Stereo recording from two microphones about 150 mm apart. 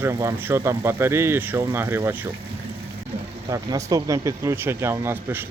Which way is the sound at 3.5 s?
20° right (ahead or behind).